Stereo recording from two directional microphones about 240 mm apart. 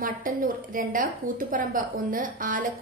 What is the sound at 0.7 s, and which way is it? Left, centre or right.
A woman's voice, right.